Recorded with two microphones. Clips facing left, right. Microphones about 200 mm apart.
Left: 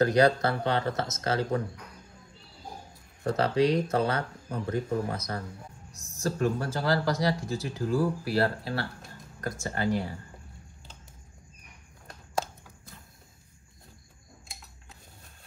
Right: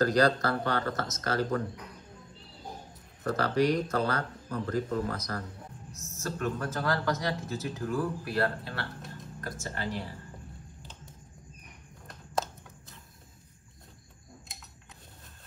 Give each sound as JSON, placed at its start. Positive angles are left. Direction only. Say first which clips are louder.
{"t": 0.0, "sound": "speech", "louder": "left 3 dB", "side_deg": 25}
{"t": 3.3, "sound": "speech", "louder": "left 2 dB", "side_deg": 25}
{"t": 5.9, "sound": "a sound", "louder": "right 5 dB", "side_deg": 15}
{"t": 6.1, "sound": "speech", "louder": "left 5 dB", "side_deg": 35}
{"t": 9.4, "sound": "speech", "louder": "left 6 dB", "side_deg": 45}
{"t": 12.4, "sound": "a sound", "louder": "right 1 dB", "side_deg": 0}